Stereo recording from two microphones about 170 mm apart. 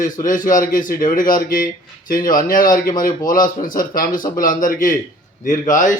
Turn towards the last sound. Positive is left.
turn(degrees=50)  # may be behind; listen again after turning